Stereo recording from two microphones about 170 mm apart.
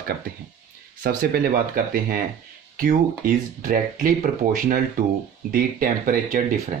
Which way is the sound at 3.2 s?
55° right (ahead or behind).